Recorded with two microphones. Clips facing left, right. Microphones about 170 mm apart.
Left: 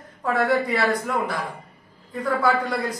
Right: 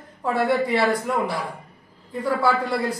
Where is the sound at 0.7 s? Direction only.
25° right (ahead or behind).